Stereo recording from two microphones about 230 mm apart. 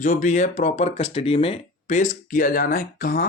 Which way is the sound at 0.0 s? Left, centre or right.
Left.